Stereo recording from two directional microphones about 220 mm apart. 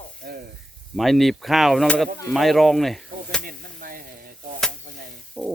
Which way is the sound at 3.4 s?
40° right (ahead or behind).